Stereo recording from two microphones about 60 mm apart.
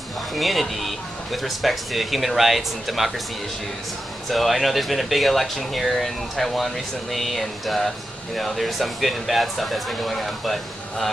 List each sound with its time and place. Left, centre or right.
0.3 s speech: centre
4.3 s speech: centre